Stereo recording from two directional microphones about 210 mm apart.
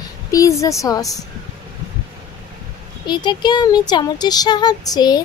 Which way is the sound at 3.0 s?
20° left (ahead or behind).